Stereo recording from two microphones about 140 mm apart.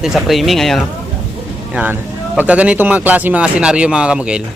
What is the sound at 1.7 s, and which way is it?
Speech, 10° right (ahead or behind).